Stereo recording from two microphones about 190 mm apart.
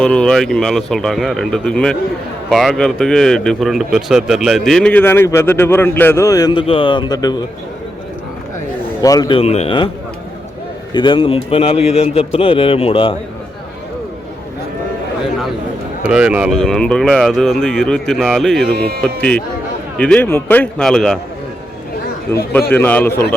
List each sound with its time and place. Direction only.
0.0 s speech: 5° left (ahead or behind); by 7.4 s 20° left (ahead or behind)
9.0 s a man's voice: 20° left (ahead or behind)
9.4 s a man's voice: 35° left (ahead or behind)
10.9 s a man's voice: 25° left (ahead or behind)
16.0 s speech: 5° right (ahead or behind)
18.7 s speech: 55° right (ahead or behind)
19.0 s speech: 5° left (ahead or behind)
22.3 s speech: 10° left (ahead or behind)